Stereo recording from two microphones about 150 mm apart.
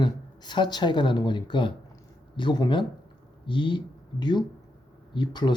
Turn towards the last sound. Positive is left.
turn(degrees=30)  # may be behind; listen again after turning